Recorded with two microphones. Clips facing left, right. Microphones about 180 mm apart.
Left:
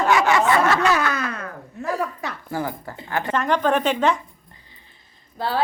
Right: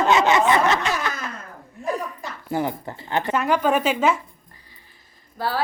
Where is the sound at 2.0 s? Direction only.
70° left (ahead or behind).